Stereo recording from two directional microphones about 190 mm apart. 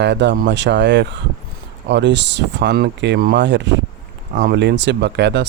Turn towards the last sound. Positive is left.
turn(degrees=-65)  # may be behind; listen again after turning